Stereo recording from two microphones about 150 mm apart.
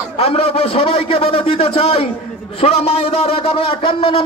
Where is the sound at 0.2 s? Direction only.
40° left (ahead or behind).